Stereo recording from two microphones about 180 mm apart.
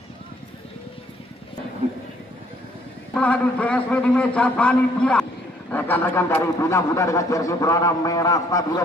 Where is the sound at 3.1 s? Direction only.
5° left (ahead or behind).